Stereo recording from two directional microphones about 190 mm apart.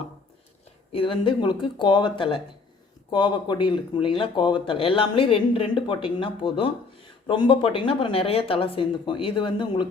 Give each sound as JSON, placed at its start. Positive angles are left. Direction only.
{"t": 0.9, "sound": "speech", "side_deg": 25}